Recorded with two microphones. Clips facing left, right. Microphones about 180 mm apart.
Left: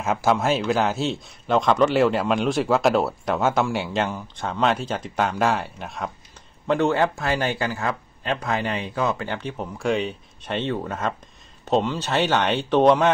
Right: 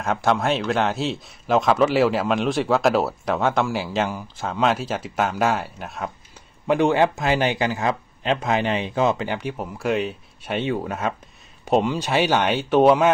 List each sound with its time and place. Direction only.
0.0 s speech: 5° left (ahead or behind)
6.7 s speech: 15° right (ahead or behind)